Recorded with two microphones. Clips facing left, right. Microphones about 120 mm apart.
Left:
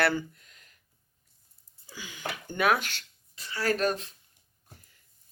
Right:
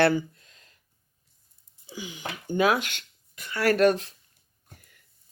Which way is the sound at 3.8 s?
30° left (ahead or behind).